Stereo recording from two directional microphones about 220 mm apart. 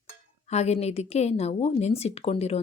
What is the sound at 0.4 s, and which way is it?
Speech, 30° left (ahead or behind).